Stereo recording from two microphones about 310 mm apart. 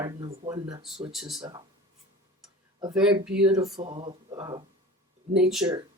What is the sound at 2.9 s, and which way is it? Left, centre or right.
Speech, centre.